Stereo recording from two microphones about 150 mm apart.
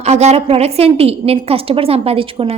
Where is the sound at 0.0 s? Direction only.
45° right (ahead or behind).